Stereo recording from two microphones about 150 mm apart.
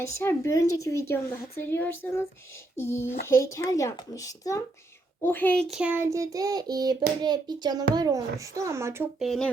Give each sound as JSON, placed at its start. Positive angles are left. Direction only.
{"t": 0.0, "sound": "a child's voice", "side_deg": 15}
{"t": 5.6, "sound": "speech", "side_deg": 0}
{"t": 5.9, "sound": "child singing", "side_deg": -20}
{"t": 9.1, "sound": "speech", "side_deg": 0}